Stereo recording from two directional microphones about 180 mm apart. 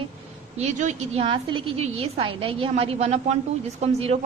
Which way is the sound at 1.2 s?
30° right (ahead or behind).